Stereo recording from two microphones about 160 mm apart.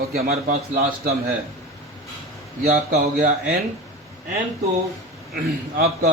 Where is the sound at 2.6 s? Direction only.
45° right (ahead or behind).